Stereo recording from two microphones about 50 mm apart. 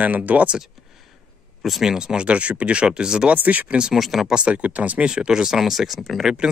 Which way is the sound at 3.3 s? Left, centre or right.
Right.